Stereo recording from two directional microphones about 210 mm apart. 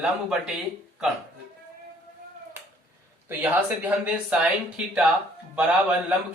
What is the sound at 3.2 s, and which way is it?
Speech, 10° right (ahead or behind).